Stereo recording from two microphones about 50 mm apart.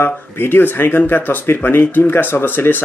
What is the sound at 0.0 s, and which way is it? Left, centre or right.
Speech, left.